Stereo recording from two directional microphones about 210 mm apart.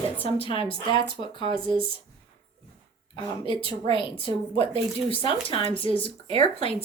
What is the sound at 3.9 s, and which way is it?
A woman's voice, 25° left (ahead or behind).